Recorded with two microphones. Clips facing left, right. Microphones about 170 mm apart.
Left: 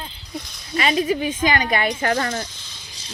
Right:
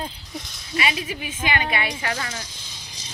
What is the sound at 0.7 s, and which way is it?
Speech, 40° left (ahead or behind).